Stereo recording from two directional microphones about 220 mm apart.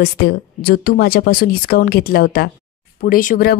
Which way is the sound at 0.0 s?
45° left (ahead or behind).